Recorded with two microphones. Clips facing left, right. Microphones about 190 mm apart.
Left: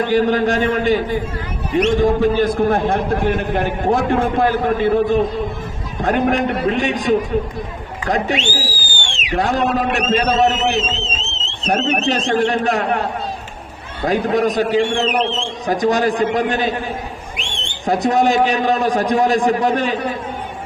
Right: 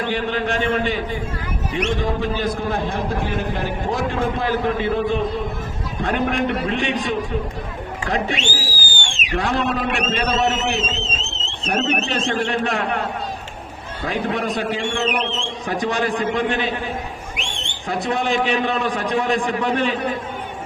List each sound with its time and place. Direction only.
0.0 s a man's voice: 40° left (ahead or behind)
14.1 s speech: 40° left (ahead or behind)
17.8 s speech: 40° left (ahead or behind)